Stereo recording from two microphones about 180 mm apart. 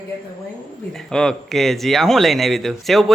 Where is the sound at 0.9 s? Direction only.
5° left (ahead or behind).